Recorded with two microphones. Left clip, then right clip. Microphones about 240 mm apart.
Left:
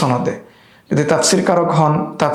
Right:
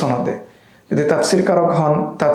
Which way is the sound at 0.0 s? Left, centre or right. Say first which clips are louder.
Left 2 dB; left.